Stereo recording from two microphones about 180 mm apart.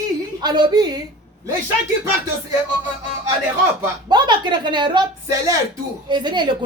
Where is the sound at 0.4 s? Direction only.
25° right (ahead or behind).